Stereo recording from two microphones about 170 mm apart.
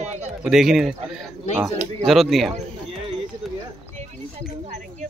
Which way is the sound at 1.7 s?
40° right (ahead or behind).